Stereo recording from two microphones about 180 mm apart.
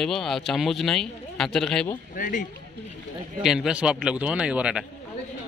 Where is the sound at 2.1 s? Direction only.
45° left (ahead or behind).